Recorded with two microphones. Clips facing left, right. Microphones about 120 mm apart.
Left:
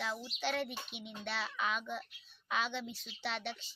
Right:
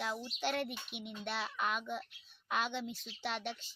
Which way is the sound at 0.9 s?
55° right (ahead or behind).